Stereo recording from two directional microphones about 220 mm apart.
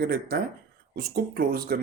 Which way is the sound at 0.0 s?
45° right (ahead or behind).